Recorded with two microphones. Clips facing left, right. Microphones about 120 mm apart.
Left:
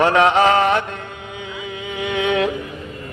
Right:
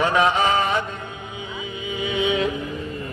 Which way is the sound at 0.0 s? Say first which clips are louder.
Left 5 dB; 70° left (ahead or behind).